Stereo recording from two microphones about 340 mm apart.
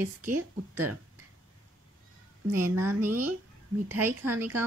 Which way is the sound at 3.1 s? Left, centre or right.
Right.